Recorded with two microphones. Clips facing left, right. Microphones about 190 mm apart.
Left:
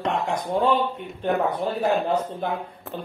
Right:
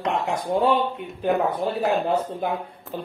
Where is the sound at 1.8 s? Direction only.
5° right (ahead or behind).